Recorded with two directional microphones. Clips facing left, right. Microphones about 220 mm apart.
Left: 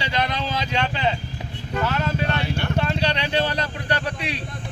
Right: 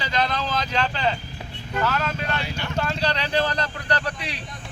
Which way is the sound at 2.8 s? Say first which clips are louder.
Left 2 dB; 15° left (ahead or behind).